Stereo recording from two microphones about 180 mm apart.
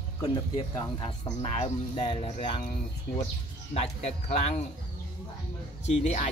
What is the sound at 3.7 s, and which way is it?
Speech, 35° left (ahead or behind).